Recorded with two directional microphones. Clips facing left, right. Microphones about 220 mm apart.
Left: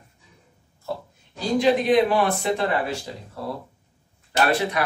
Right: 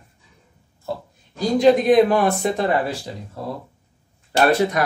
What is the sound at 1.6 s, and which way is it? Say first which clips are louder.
Speech: right 5 dB; 45° right (ahead or behind).